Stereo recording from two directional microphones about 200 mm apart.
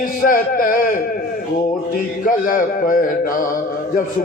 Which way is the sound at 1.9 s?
45° left (ahead or behind).